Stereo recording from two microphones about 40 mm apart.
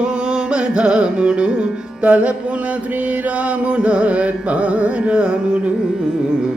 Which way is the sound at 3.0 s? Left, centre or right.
Right.